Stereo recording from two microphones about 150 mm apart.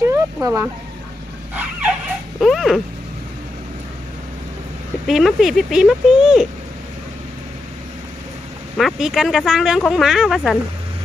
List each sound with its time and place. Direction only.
0.0 s a sound: 20° right (ahead or behind)
0.4 s speech: 20° right (ahead or behind)
2.4 s speech: centre (ahead or behind)
5.0 s speech: centre (ahead or behind)
8.8 s speech: 5° right (ahead or behind)